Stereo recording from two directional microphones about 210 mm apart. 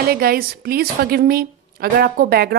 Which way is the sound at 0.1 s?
45° right (ahead or behind).